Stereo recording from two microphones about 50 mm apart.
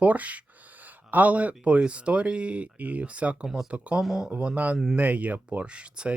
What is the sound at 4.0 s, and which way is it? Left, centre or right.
Speech, centre.